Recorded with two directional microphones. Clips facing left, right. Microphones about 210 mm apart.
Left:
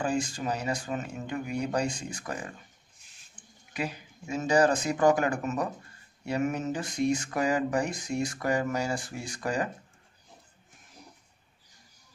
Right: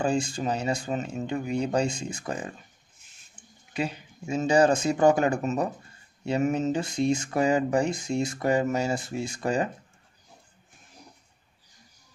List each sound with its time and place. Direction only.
0.0 s speech: 25° right (ahead or behind)
3.4 s a sound: 25° right (ahead or behind)
3.7 s speech: 25° right (ahead or behind)